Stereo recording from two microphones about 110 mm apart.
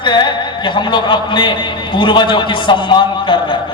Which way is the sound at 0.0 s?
45° left (ahead or behind).